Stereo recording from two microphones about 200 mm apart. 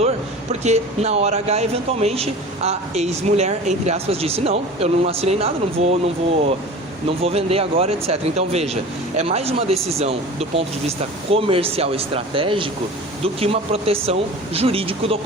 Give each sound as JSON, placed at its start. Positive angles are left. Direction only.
{"t": 0.6, "sound": "speech", "side_deg": -35}
{"t": 7.2, "sound": "speech", "side_deg": -30}